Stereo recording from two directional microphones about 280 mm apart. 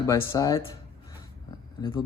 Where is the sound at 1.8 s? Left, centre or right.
Centre.